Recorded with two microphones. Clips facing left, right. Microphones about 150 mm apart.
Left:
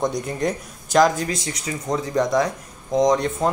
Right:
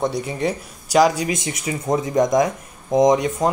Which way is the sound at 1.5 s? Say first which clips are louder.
Right 4 dB; 20° right (ahead or behind).